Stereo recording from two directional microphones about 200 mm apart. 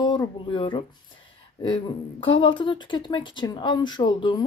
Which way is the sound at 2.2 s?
25° left (ahead or behind).